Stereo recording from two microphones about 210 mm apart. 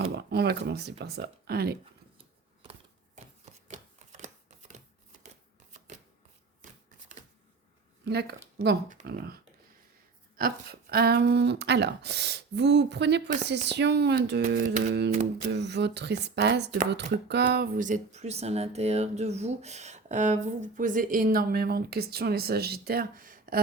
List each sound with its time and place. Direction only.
0.0 s speech: 50° right (ahead or behind)
2.1 s a sound: 25° right (ahead or behind)
5.9 s shuffling cards: 35° right (ahead or behind)
8.0 s speech: 50° right (ahead or behind)
14.4 s speech: 40° right (ahead or behind)
15.4 s speech: 55° right (ahead or behind)